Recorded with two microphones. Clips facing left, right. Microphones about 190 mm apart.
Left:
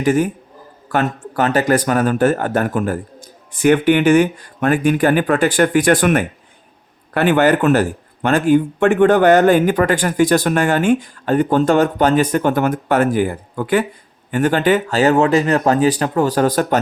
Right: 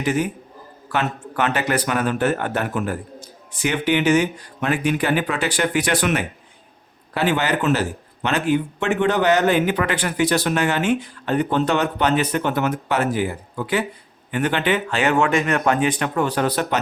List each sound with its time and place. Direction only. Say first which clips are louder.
0.0 s speech: left 6 dB; 50° left (ahead or behind)